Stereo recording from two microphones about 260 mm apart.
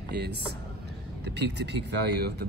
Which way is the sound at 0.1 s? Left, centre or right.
Right.